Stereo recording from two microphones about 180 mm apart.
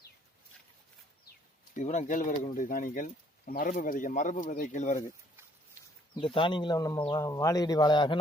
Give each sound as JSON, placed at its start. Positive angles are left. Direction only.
{"t": 1.7, "sound": "speech", "side_deg": 40}
{"t": 6.1, "sound": "speech", "side_deg": 30}